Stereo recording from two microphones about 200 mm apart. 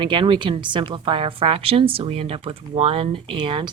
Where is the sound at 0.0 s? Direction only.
25° right (ahead or behind).